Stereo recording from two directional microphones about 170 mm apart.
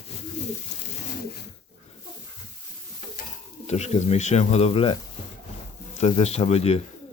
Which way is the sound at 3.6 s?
40° left (ahead or behind).